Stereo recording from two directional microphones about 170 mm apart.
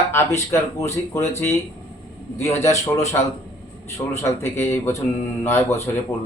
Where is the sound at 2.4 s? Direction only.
15° left (ahead or behind).